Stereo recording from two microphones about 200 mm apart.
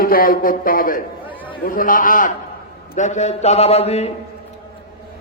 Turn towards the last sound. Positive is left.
turn(degrees=30)  # may be behind; listen again after turning